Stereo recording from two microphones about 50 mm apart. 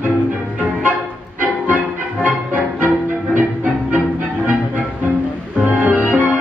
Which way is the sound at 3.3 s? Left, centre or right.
Right.